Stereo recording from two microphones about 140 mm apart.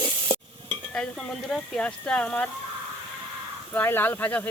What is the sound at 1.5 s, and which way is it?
Speech, 5° left (ahead or behind).